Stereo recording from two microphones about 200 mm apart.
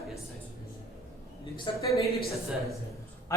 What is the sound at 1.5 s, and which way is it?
Speech, 25° left (ahead or behind).